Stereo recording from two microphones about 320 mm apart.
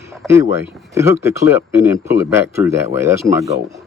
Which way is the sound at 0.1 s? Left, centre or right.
Centre.